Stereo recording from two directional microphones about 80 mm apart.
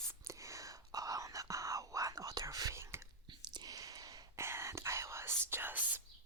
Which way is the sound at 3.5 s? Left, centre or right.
Right.